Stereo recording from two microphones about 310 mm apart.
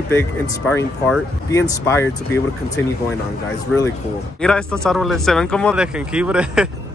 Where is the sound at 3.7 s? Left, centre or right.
Centre.